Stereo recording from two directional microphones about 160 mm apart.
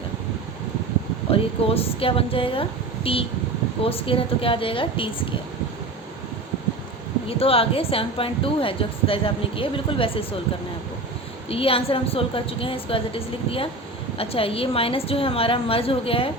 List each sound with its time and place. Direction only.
1.3 s speech: 35° left (ahead or behind)
7.3 s speech: 35° left (ahead or behind)
11.4 s speech: 35° left (ahead or behind)